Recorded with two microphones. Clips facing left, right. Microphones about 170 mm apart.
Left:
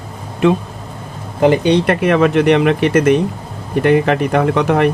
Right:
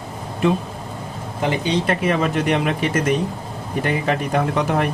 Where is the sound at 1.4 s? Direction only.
70° left (ahead or behind).